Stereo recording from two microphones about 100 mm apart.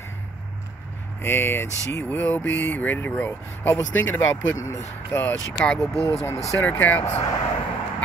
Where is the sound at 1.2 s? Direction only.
25° left (ahead or behind).